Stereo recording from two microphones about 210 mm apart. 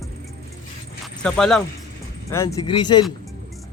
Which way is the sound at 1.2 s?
5° left (ahead or behind).